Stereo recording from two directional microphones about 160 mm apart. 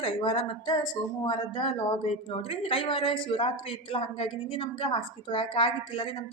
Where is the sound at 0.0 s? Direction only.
35° left (ahead or behind).